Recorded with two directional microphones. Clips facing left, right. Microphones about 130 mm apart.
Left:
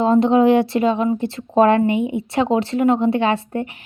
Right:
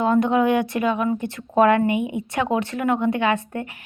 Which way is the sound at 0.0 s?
30° left (ahead or behind).